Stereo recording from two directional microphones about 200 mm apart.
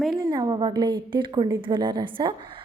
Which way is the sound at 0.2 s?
20° right (ahead or behind).